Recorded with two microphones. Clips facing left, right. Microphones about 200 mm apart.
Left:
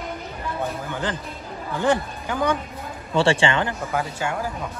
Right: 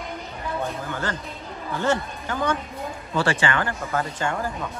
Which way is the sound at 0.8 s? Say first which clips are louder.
Left 1 dB; 15° left (ahead or behind).